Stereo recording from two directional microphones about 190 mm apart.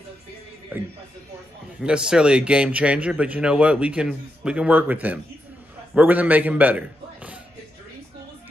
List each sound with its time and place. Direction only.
0.7 s a man's voice: 10° right (ahead or behind)